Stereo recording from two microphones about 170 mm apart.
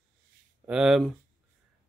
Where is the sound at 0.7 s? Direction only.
5° right (ahead or behind).